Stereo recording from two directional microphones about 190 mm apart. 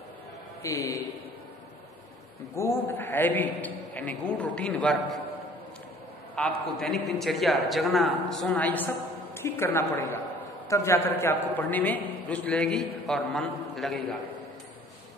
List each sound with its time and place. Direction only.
0.6 s a man's voice: 15° left (ahead or behind)
2.6 s a man's voice: 15° left (ahead or behind)
6.3 s a man's voice: 5° left (ahead or behind)